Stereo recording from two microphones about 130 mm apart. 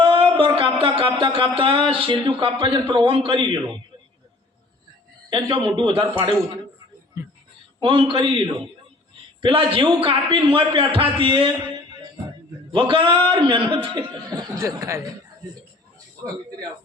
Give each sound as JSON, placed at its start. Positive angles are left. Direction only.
{"t": 0.0, "sound": "a sound", "side_deg": -40}
{"t": 0.3, "sound": "speech", "side_deg": -45}
{"t": 5.3, "sound": "speech", "side_deg": -40}
{"t": 7.2, "sound": "speech", "side_deg": -25}
{"t": 7.8, "sound": "speech", "side_deg": -45}
{"t": 12.7, "sound": "speech", "side_deg": -40}
{"t": 14.3, "sound": "speech", "side_deg": -25}